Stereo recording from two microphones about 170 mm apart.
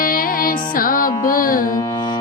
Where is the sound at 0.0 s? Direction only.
55° left (ahead or behind).